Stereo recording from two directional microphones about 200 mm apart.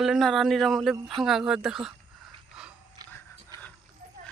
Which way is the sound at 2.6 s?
5° right (ahead or behind).